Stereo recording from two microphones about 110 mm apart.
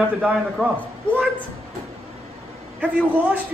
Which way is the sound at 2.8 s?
10° right (ahead or behind).